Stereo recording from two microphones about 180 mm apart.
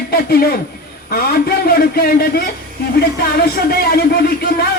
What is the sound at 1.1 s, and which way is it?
A man's voice, 55° left (ahead or behind).